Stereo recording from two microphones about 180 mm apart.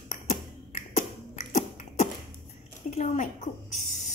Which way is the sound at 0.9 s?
40° left (ahead or behind).